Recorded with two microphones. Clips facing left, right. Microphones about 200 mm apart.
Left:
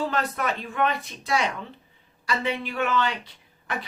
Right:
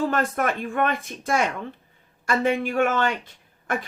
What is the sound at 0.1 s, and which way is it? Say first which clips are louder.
Speech: right 3 dB; 50° right (ahead or behind).